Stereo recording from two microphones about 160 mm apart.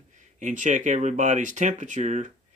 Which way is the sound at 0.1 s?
50° right (ahead or behind).